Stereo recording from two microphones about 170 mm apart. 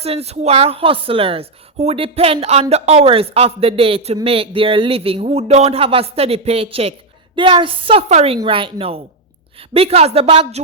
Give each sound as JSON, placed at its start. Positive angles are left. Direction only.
{"t": 0.0, "sound": "a woman's voice", "side_deg": -35}